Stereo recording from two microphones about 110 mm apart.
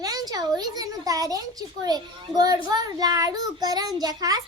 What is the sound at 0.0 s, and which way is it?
Speech, 35° right (ahead or behind).